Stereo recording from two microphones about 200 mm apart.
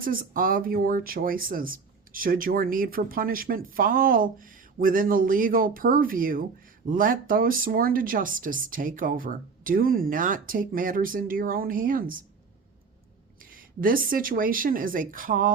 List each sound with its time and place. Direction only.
0.0 s speech: 45° right (ahead or behind)
13.4 s speech: 45° right (ahead or behind)